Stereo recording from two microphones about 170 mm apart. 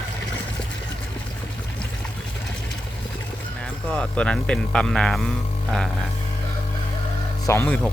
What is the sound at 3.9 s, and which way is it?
Speech, 5° left (ahead or behind).